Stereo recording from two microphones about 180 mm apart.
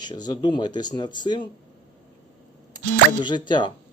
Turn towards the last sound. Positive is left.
turn(degrees=25)  # may be behind; listen again after turning